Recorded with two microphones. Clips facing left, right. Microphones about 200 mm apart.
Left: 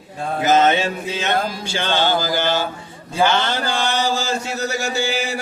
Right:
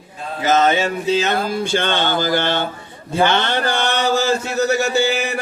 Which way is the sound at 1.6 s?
60° right (ahead or behind).